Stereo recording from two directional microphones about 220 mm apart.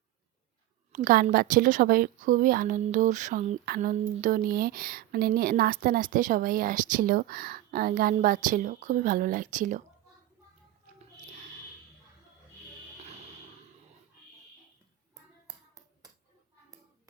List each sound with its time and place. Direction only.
0.9 s a woman's voice: 40° right (ahead or behind)
15.1 s clapping: 15° right (ahead or behind)